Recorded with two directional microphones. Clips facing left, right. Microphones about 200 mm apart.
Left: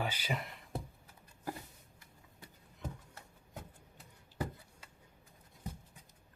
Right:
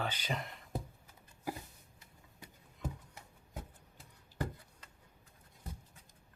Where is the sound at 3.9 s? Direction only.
5° left (ahead or behind).